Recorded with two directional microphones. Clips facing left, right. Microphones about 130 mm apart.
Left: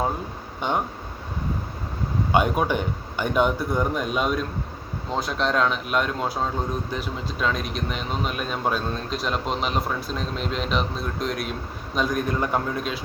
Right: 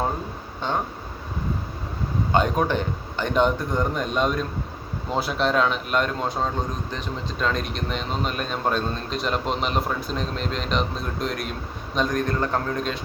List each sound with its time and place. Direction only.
0.7 s a man's voice: 15° left (ahead or behind)
2.3 s a man's voice: 10° left (ahead or behind)